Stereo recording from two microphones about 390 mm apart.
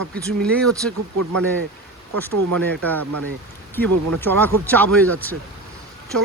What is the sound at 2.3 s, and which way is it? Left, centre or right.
Speech, right.